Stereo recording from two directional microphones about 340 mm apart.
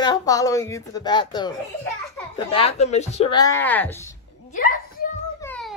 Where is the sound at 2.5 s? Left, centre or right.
Centre.